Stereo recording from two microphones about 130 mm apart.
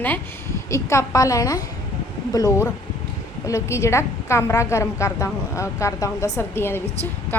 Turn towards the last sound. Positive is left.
turn(degrees=20)  # may be behind; listen again after turning